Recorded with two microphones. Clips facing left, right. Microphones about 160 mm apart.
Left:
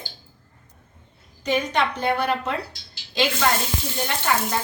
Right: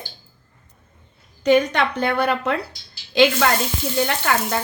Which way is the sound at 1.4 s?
65° right (ahead or behind).